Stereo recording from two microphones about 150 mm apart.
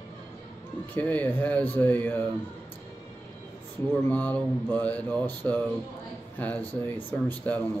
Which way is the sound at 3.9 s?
10° left (ahead or behind).